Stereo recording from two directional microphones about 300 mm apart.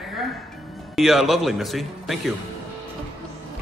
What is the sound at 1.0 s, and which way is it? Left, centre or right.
Speech, centre.